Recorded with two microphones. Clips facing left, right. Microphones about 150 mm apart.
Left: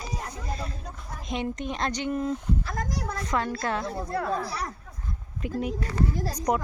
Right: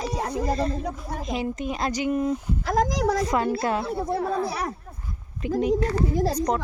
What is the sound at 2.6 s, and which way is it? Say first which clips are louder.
Speech: right 10 dB; 90° right.